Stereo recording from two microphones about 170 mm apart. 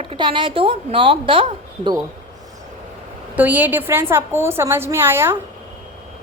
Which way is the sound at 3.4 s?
10° right (ahead or behind).